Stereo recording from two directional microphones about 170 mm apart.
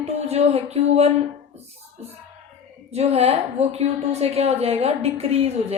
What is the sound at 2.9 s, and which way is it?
A woman's voice, 35° right (ahead or behind).